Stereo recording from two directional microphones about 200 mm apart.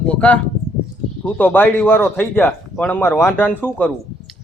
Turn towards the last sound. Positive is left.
turn(degrees=10)  # may be behind; listen again after turning